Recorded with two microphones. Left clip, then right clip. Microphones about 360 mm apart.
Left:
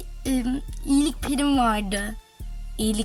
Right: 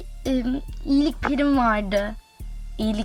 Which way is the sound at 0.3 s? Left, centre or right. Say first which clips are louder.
Right 2 dB; centre.